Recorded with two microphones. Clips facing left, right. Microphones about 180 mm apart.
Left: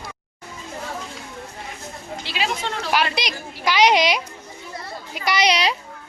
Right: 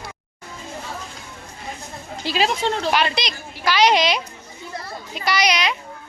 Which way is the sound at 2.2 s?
40° right (ahead or behind).